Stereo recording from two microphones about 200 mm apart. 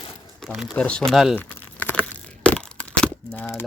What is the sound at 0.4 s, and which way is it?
Speech, centre (ahead or behind).